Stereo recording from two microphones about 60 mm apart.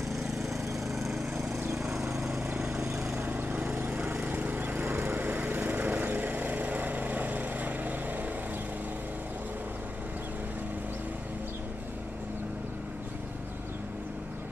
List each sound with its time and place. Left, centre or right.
0.1 s lawn mower: centre
2.6 s vehicle: centre
3.2 s vehicle: right
4.2 s lawn mower: right